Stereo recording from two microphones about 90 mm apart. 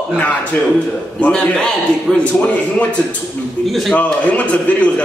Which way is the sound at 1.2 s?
10° left (ahead or behind).